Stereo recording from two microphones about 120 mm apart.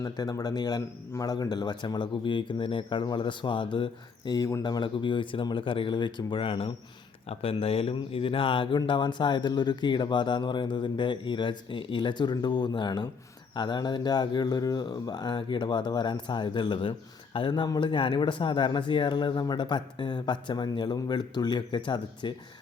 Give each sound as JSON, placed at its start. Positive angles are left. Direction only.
{"t": 0.0, "sound": "speech", "side_deg": 30}
{"t": 4.3, "sound": "speech", "side_deg": 30}